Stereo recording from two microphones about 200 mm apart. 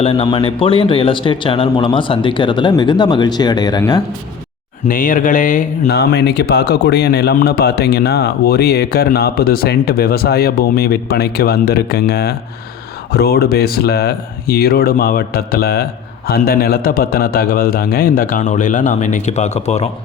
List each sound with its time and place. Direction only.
0.0 s a man's voice: 25° left (ahead or behind)
4.9 s speech: 45° left (ahead or behind)